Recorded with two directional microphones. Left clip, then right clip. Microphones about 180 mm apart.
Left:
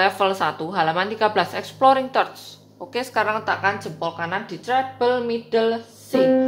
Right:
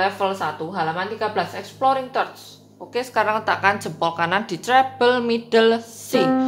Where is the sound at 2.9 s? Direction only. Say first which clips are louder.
Right 1 dB; 5° left (ahead or behind); by 6.2 s 25° right (ahead or behind).